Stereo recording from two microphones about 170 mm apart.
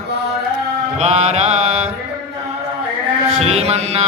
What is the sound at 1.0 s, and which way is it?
Mantra, 40° right (ahead or behind).